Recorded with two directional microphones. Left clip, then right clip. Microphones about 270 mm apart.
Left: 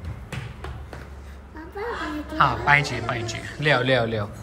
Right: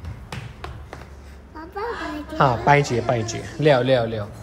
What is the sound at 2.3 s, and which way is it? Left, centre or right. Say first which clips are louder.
Speech: right 2 dB; right.